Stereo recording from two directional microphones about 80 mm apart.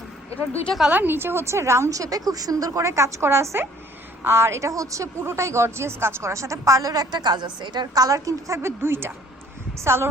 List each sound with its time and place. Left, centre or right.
0.9 s a woman's voice: right
8.0 s a woman's voice: right